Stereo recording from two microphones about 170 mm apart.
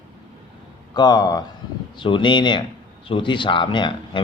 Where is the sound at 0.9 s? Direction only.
25° left (ahead or behind).